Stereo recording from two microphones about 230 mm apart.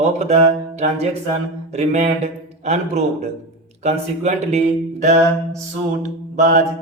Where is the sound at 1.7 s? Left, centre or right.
Right.